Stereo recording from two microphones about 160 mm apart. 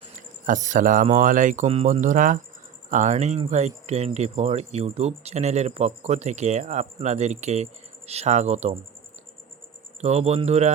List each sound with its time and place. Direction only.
0.2 s speech: 50° right (ahead or behind)
10.0 s speech: 45° right (ahead or behind)